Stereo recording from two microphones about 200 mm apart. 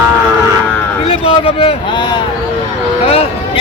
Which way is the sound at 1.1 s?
25° left (ahead or behind).